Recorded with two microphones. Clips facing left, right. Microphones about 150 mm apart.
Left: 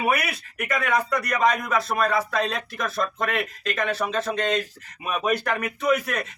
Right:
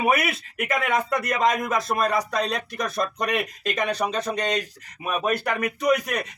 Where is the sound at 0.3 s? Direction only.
20° right (ahead or behind).